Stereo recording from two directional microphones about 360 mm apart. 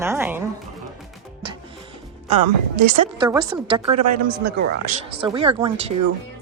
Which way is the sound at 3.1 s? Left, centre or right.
Centre.